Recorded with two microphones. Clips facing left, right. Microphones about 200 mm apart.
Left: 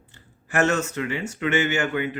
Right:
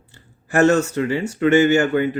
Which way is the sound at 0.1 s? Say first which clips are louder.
Right 6 dB; 35° right (ahead or behind).